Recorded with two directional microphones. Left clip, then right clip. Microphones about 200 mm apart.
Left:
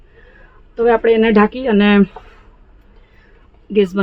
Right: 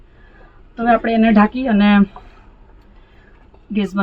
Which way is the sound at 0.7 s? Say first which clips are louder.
Left 3 dB; 30° left (ahead or behind).